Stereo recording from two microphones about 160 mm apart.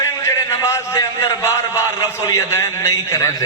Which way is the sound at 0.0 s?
20° left (ahead or behind).